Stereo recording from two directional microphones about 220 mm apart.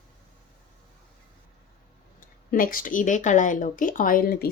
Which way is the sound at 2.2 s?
40° left (ahead or behind).